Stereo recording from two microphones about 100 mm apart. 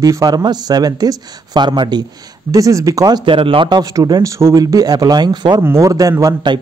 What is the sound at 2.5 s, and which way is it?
Speech, 35° right (ahead or behind).